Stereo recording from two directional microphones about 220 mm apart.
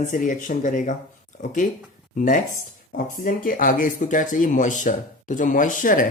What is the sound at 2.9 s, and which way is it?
Speech, 40° left (ahead or behind).